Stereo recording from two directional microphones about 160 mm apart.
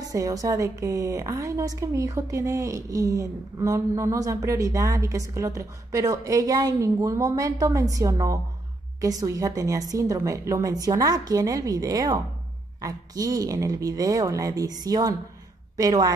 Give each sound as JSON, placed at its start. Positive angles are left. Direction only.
{"t": 0.0, "sound": "a woman's voice", "side_deg": -20}